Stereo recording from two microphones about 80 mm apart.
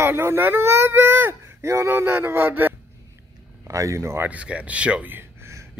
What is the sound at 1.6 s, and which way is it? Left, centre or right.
Speech, right.